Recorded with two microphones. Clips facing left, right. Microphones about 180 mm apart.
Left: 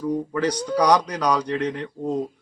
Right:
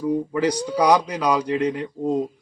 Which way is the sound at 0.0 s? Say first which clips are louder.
Right 2 dB; 10° right (ahead or behind).